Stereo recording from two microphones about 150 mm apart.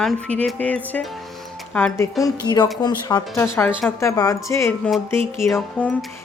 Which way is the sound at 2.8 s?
30° left (ahead or behind).